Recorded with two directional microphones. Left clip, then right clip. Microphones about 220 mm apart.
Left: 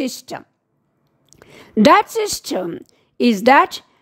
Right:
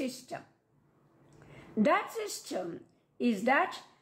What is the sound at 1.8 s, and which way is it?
A woman's voice, 55° left (ahead or behind).